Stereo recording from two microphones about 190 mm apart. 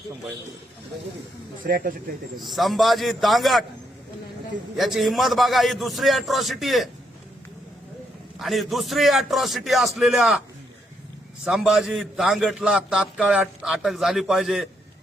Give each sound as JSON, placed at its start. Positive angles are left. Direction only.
{"t": 1.6, "sound": "speech", "side_deg": -50}
{"t": 2.4, "sound": "a man's voice", "side_deg": 0}
{"t": 4.8, "sound": "a man's voice", "side_deg": 0}
{"t": 8.4, "sound": "a man's voice", "side_deg": 0}
{"t": 11.4, "sound": "a man's voice", "side_deg": 0}